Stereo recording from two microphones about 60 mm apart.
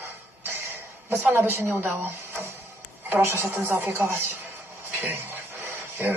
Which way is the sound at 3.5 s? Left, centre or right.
Right.